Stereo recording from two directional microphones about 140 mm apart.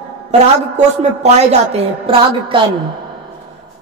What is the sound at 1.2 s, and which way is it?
A woman's voice, 50° right (ahead or behind).